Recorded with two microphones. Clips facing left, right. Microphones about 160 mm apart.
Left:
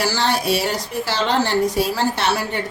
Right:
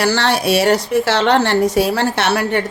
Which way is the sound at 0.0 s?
70° right (ahead or behind).